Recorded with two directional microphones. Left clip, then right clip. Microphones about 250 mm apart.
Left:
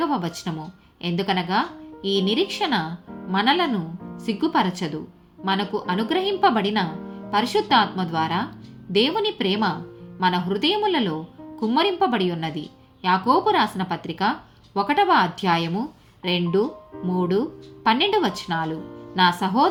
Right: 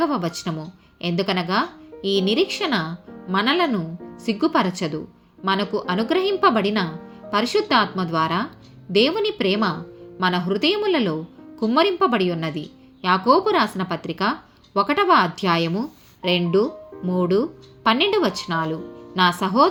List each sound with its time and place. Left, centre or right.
0.0 s a woman's voice: centre